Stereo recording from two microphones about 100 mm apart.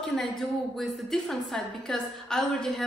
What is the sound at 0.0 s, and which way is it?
A woman's voice, 5° left (ahead or behind).